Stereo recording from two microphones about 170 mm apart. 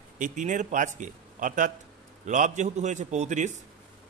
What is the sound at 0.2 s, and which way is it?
A man's voice, 45° right (ahead or behind).